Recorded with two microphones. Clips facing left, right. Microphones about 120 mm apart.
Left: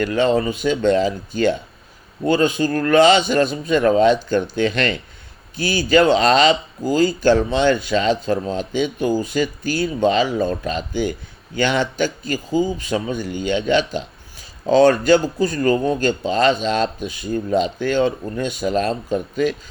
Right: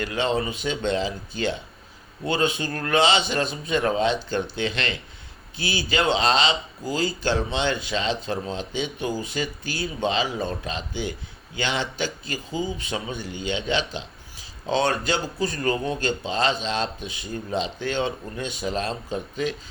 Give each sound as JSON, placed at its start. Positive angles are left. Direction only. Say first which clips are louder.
{"t": 0.0, "sound": "speech", "louder": "left 7 dB", "side_deg": 45}